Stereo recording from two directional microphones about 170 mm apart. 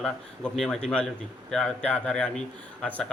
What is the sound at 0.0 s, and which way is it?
Speech, 5° left (ahead or behind).